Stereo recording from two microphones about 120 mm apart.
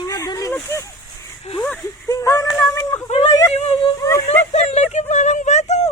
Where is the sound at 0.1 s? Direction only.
30° left (ahead or behind).